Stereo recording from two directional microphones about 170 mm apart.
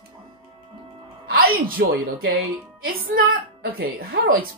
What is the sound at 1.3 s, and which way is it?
Speech, 60° right (ahead or behind).